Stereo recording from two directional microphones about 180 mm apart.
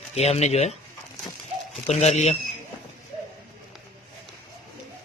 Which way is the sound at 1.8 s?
35° left (ahead or behind).